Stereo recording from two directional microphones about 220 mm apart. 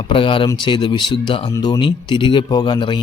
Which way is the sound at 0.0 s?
25° left (ahead or behind).